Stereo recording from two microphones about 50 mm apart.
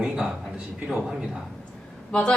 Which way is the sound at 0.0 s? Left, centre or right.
Centre.